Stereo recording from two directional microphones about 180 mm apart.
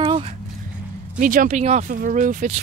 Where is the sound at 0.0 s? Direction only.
30° right (ahead or behind).